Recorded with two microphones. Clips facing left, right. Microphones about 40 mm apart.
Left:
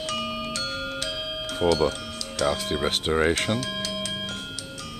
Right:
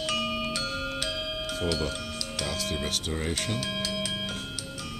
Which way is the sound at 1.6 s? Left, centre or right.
Left.